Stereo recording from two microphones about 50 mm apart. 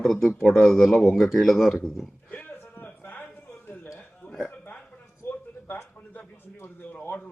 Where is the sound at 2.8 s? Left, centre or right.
Left.